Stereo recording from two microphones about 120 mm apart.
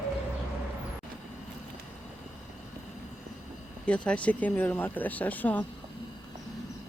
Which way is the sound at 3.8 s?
10° left (ahead or behind).